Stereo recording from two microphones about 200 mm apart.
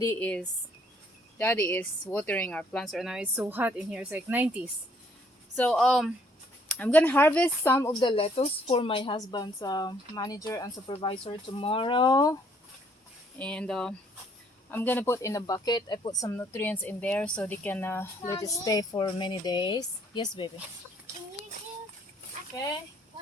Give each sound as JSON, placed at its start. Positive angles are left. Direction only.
{"t": 0.0, "sound": "speech", "side_deg": 10}
{"t": 5.5, "sound": "speech", "side_deg": 5}
{"t": 8.0, "sound": "a woman's voice", "side_deg": 30}
{"t": 13.4, "sound": "speech", "side_deg": 5}